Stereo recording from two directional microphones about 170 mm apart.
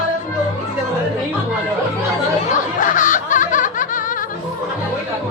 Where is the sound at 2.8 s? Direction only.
50° left (ahead or behind).